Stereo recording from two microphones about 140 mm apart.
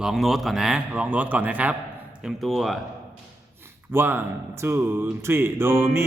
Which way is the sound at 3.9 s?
15° right (ahead or behind).